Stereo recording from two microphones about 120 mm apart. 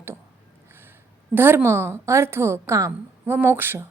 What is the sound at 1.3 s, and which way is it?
A woman's voice, 20° right (ahead or behind).